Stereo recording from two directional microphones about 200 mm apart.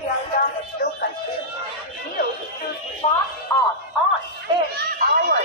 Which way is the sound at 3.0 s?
30° left (ahead or behind).